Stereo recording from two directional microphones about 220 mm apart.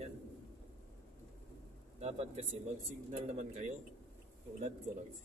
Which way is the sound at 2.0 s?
30° right (ahead or behind).